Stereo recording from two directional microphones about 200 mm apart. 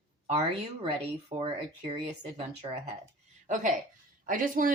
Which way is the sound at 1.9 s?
30° right (ahead or behind).